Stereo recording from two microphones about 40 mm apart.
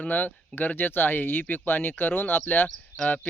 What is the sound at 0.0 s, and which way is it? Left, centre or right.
Speech, left.